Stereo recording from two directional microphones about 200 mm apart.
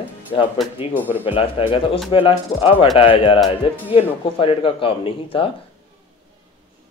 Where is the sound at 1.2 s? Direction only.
25° left (ahead or behind).